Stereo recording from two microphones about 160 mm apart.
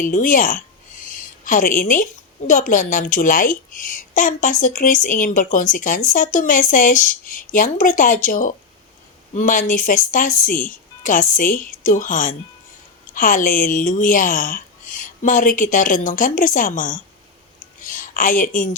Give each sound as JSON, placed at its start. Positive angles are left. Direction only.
{"t": 0.0, "sound": "a woman's voice", "side_deg": 55}
{"t": 1.0, "sound": "a sound", "side_deg": 55}
{"t": 2.5, "sound": "a woman's voice", "side_deg": 55}